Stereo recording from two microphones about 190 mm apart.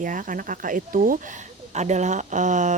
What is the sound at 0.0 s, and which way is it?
Speech, 45° right (ahead or behind).